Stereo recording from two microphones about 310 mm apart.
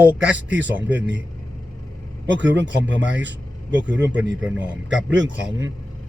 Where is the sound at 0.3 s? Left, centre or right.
Right.